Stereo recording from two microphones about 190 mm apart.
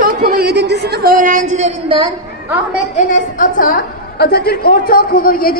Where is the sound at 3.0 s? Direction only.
45° left (ahead or behind).